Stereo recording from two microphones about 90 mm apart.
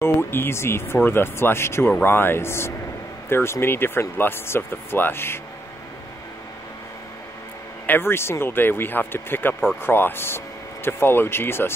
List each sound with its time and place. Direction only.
0.0 s speech: 25° left (ahead or behind)
7.8 s speech: 25° left (ahead or behind)